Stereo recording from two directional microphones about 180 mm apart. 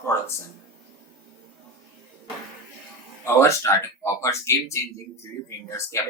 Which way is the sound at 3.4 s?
15° left (ahead or behind).